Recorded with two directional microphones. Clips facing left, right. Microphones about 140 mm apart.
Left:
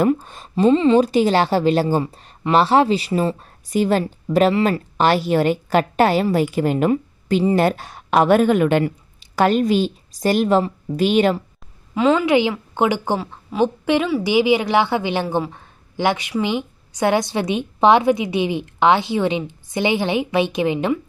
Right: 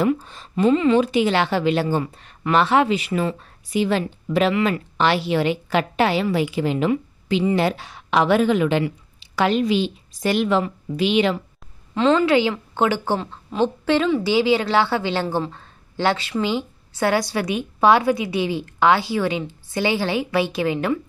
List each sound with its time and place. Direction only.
0.0 s a woman's voice: 45° left (ahead or behind)
0.6 s a woman's voice: 30° left (ahead or behind); by 11.4 s 45° left (ahead or behind)
11.9 s a woman's voice: 10° left (ahead or behind)